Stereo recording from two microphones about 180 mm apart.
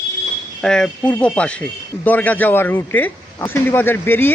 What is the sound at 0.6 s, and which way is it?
A man's voice, 5° left (ahead or behind).